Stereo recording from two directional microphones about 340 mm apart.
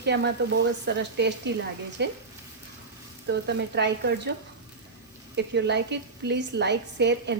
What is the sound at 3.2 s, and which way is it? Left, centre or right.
A woman's voice, right.